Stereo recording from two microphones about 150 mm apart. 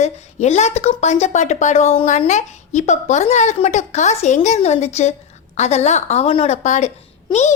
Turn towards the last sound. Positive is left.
turn(degrees=50)  # may be behind; listen again after turning